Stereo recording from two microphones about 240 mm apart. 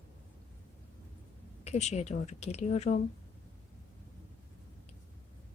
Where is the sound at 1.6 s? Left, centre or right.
Left.